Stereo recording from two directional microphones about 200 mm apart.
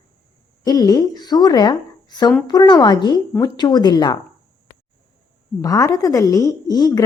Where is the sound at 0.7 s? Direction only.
20° left (ahead or behind).